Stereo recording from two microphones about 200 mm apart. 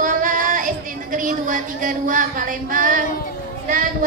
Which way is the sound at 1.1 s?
40° right (ahead or behind).